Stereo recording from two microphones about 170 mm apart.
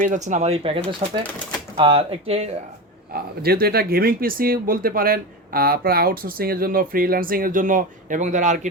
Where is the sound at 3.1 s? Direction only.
65° right (ahead or behind); by 8.7 s 45° right (ahead or behind).